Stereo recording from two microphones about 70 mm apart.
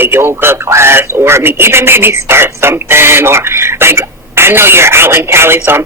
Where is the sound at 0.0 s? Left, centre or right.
Right.